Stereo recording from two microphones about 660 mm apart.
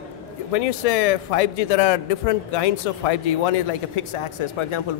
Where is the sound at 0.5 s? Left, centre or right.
Left.